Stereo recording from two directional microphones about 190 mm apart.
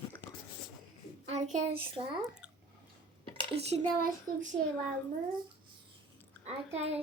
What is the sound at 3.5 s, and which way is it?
Speech, 35° right (ahead or behind).